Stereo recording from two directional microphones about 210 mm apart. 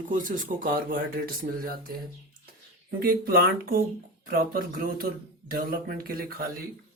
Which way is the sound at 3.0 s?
45° right (ahead or behind).